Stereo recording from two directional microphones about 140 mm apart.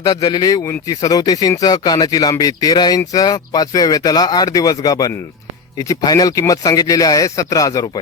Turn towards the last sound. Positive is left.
turn(degrees=30)  # may be behind; listen again after turning